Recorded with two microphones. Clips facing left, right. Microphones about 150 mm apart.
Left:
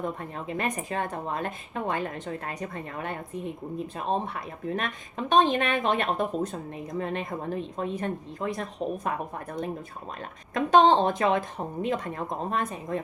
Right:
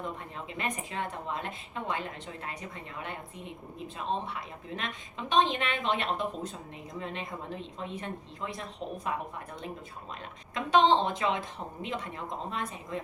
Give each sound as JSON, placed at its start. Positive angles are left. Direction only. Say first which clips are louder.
{"t": 0.3, "sound": "a woman's voice", "louder": "left 4 dB", "side_deg": 50}
{"t": 10.5, "sound": "a woman's voice", "louder": "left 4 dB", "side_deg": 45}